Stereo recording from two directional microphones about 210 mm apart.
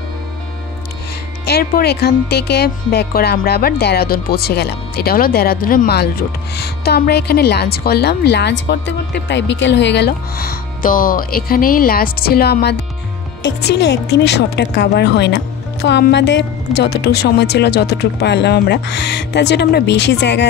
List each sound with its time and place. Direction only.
1.4 s speech: 50° left (ahead or behind)